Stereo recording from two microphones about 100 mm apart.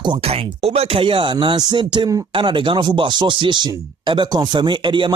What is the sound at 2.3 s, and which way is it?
Speech, 55° right (ahead or behind).